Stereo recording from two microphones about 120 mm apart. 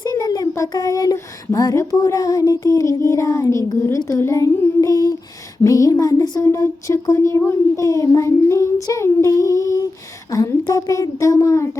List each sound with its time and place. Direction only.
0.1 s speech: 30° left (ahead or behind)